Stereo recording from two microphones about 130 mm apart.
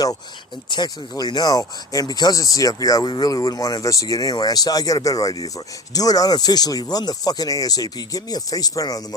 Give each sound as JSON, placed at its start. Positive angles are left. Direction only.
{"t": 0.7, "sound": "speech", "side_deg": 30}